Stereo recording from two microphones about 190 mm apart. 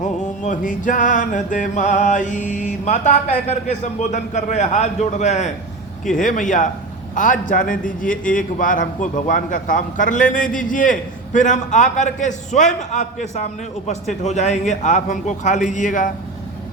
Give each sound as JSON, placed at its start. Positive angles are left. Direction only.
{"t": 0.0, "sound": "music", "side_deg": 40}
{"t": 7.2, "sound": "a man's voice", "side_deg": 45}
{"t": 13.8, "sound": "music", "side_deg": 40}